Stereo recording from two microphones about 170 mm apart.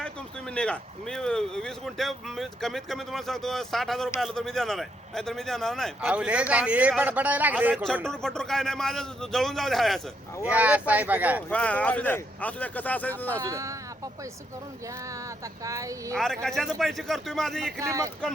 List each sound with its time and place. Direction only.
0.5 s a man's voice: 5° left (ahead or behind); by 7.9 s 10° right (ahead or behind)
8.0 s a man's voice: 5° left (ahead or behind)
11.4 s speech: 5° left (ahead or behind)
13.4 s a man's voice: 20° right (ahead or behind)
15.6 s speech: 20° right (ahead or behind)
16.1 s speech: 5° left (ahead or behind)
17.7 s a man's voice: 20° right (ahead or behind)